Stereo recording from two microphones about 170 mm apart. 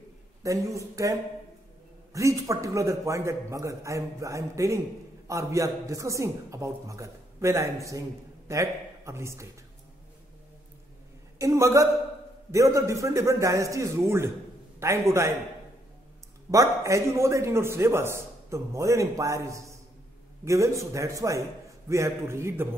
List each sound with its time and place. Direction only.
0.4 s a man's voice: 20° right (ahead or behind)
2.1 s a man's voice: 20° right (ahead or behind)
11.3 s a man's voice: 15° right (ahead or behind)
16.4 s a man's voice: 20° right (ahead or behind)